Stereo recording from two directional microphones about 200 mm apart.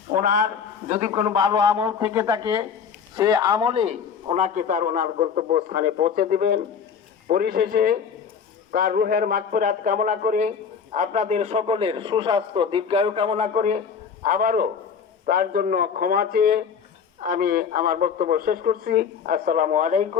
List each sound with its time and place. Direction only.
0.2 s a man's voice: 45° right (ahead or behind)
1.7 s a man's voice: 10° right (ahead or behind)
2.2 s a man's voice: 25° right (ahead or behind)